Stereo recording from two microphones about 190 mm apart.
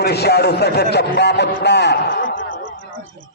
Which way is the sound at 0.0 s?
60° left (ahead or behind).